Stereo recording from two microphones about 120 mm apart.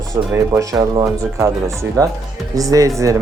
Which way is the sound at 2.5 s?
30° right (ahead or behind).